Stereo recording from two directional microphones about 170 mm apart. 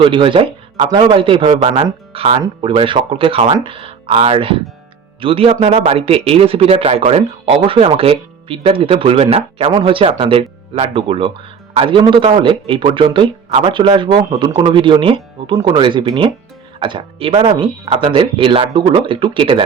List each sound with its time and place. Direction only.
0.0 s speech: 30° right (ahead or behind)